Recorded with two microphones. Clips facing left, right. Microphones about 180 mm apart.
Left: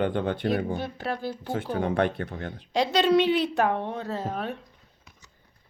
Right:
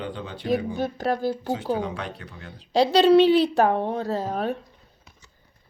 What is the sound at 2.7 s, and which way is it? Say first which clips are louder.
Speech: right 5 dB; 35° right (ahead or behind).